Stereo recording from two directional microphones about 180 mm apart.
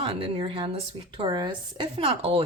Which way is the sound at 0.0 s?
30° right (ahead or behind).